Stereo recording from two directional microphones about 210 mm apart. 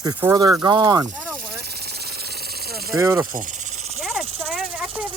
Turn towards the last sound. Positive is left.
turn(degrees=0)  # may be behind; listen again after turning